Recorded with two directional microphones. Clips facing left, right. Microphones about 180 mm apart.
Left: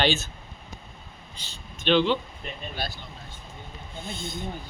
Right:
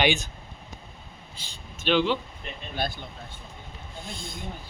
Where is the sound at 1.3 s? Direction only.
10° right (ahead or behind).